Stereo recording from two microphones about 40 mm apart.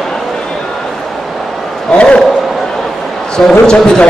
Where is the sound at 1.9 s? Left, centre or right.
Left.